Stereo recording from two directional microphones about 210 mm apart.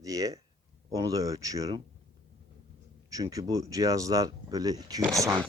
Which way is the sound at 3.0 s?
15° right (ahead or behind).